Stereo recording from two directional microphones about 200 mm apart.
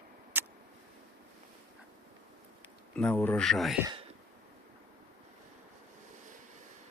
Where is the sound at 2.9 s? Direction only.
10° left (ahead or behind).